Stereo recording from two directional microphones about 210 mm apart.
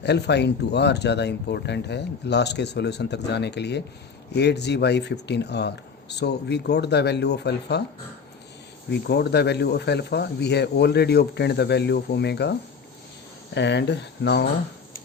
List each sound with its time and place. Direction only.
0.0 s speech: 55° left (ahead or behind)
8.9 s speech: 50° left (ahead or behind)